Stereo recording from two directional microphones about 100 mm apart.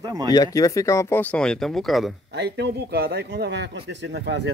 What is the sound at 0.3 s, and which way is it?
Speech, 35° left (ahead or behind).